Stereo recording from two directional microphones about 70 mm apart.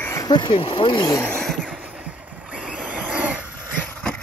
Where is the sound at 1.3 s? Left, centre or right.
Centre.